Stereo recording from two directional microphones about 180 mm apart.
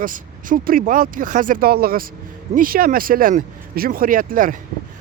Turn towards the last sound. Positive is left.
turn(degrees=-50)  # may be behind; listen again after turning